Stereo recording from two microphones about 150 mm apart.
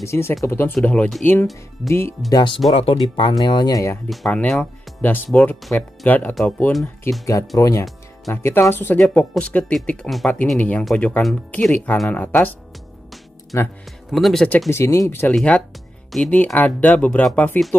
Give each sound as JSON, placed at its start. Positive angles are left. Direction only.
{"t": 0.0, "sound": "speech", "side_deg": 15}
{"t": 4.1, "sound": "speech", "side_deg": 5}
{"t": 7.2, "sound": "speech", "side_deg": 20}
{"t": 9.0, "sound": "speech", "side_deg": 0}
{"t": 13.5, "sound": "speech", "side_deg": 20}
{"t": 14.1, "sound": "speech", "side_deg": 0}
{"t": 14.7, "sound": "speech", "side_deg": 20}